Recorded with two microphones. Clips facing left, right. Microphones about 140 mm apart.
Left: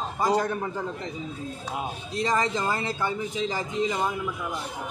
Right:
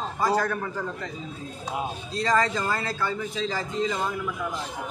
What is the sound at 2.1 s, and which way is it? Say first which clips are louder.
A man's voice: right 1 dB; 20° left (ahead or behind).